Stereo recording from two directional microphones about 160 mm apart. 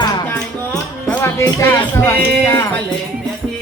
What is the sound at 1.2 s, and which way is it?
Speech, 15° left (ahead or behind).